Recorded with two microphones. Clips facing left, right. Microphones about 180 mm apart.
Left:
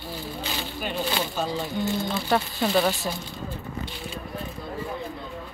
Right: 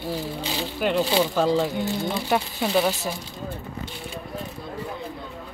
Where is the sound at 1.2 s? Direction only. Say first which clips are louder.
Right 8 dB; 90° right.